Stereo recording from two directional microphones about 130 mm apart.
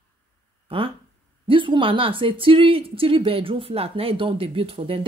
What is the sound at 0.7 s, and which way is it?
Speech, 45° right (ahead or behind).